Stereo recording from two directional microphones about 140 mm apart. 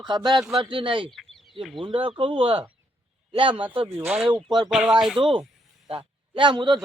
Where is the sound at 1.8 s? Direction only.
40° right (ahead or behind).